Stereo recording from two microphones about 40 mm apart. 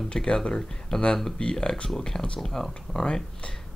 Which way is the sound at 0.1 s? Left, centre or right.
Centre.